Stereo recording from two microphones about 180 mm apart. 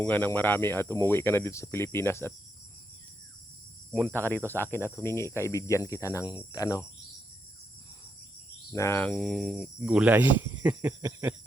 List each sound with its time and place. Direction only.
0.0 s speech: 10° left (ahead or behind)
4.1 s speech: 10° left (ahead or behind)
8.7 s speech: 15° left (ahead or behind); by 11.3 s 10° right (ahead or behind)